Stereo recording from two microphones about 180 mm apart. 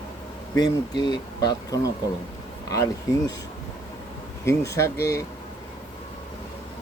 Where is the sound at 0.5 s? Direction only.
25° left (ahead or behind).